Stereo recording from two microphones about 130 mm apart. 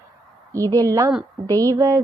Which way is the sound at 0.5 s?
25° right (ahead or behind).